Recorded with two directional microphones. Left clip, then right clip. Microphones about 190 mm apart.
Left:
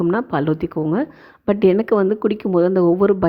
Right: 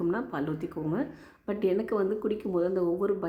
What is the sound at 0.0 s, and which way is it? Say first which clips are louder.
A woman's voice: left 11 dB; 40° left (ahead or behind).